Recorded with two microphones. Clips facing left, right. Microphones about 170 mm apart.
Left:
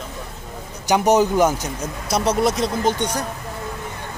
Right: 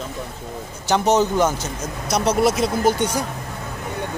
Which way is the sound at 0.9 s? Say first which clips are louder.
Left 2 dB; 15° left (ahead or behind).